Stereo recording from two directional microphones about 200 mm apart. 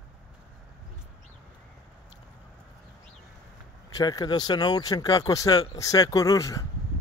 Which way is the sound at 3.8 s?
15° left (ahead or behind).